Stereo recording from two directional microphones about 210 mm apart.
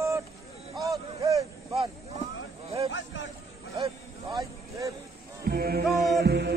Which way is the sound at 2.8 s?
65° left (ahead or behind).